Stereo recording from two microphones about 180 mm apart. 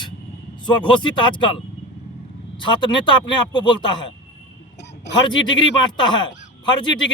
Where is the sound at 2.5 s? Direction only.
25° left (ahead or behind).